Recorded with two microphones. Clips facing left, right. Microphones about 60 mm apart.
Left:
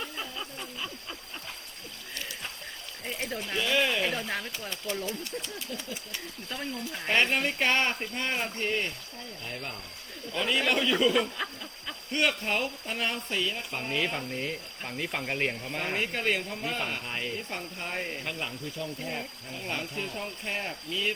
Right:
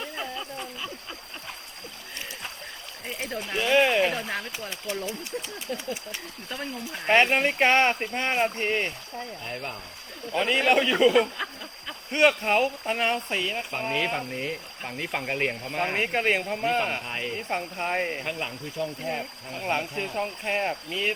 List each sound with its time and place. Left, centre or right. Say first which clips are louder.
3.1 s a sound: right 2 dB; centre
3.5 s speech: right 6 dB; right
4.0 s speech: right 4 dB; centre
7.1 s speech: right 6 dB; right
9.5 s speech: right 4 dB; centre
12.4 s speech: right 7 dB; right
17.1 s speech: right 2 dB; centre
17.3 s speech: right 6 dB; right
18.3 s speech: right 3 dB; centre
19.5 s speech: right 8 dB; right